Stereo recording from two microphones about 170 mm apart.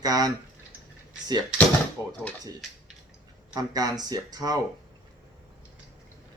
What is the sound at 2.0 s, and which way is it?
Speech, 20° left (ahead or behind).